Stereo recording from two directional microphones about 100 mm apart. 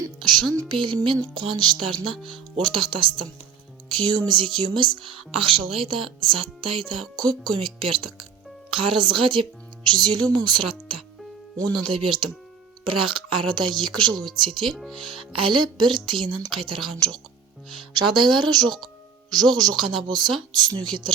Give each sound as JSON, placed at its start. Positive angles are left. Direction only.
{"t": 0.7, "sound": "a woman's voice", "side_deg": -55}
{"t": 4.3, "sound": "a woman's voice", "side_deg": -55}
{"t": 7.2, "sound": "a woman's voice", "side_deg": -45}
{"t": 9.9, "sound": "a woman's voice", "side_deg": -45}
{"t": 14.7, "sound": "speech", "side_deg": 0}
{"t": 15.3, "sound": "speech", "side_deg": -60}
{"t": 17.9, "sound": "speech", "side_deg": -50}